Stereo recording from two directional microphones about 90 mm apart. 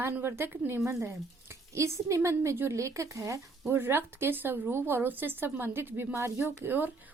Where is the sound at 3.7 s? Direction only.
25° right (ahead or behind).